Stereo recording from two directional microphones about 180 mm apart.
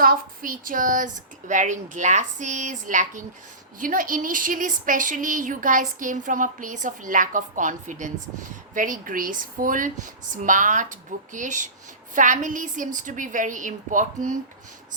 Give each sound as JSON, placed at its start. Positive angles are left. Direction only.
{"t": 0.0, "sound": "speech", "side_deg": -50}